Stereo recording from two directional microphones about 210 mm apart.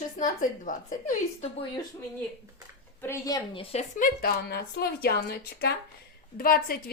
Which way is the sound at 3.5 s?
30° left (ahead or behind).